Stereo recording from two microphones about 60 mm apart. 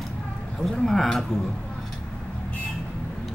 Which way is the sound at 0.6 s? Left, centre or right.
Centre.